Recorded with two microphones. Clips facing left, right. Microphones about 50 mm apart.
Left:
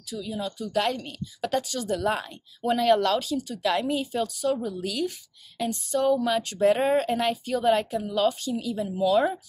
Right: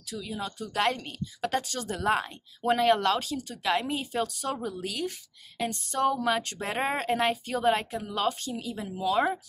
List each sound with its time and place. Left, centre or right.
0.2 s speech: right
4.8 s speech: right
5.6 s speech: right
6.6 s speech: right